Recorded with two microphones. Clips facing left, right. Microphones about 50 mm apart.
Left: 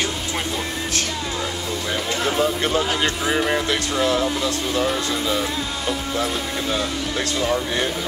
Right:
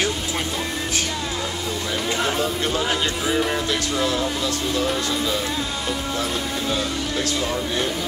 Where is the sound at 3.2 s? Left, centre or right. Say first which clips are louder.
Left 1 dB; centre.